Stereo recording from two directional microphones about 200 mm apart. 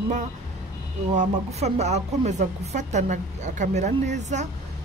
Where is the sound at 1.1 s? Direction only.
35° right (ahead or behind).